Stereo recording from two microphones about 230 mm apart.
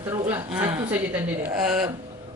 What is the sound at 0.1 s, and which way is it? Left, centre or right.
Speech, centre.